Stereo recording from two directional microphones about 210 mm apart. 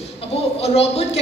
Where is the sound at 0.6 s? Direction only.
30° left (ahead or behind).